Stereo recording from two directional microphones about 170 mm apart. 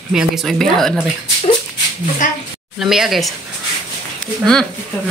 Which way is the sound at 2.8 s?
Centre (ahead or behind).